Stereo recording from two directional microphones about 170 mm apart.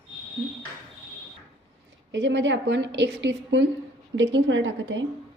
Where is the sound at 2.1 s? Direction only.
90° right.